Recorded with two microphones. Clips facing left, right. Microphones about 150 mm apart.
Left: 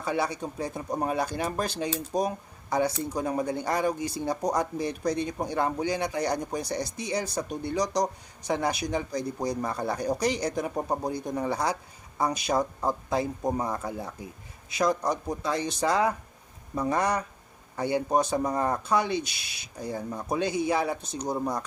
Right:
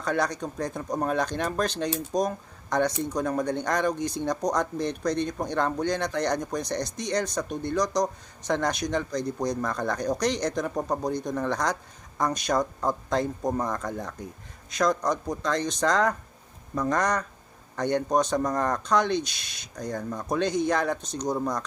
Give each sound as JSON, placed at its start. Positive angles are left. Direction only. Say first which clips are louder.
{"t": 0.0, "sound": "speech", "louder": "right 2 dB", "side_deg": 5}